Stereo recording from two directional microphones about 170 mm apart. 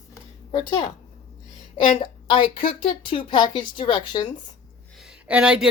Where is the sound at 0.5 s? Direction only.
25° left (ahead or behind).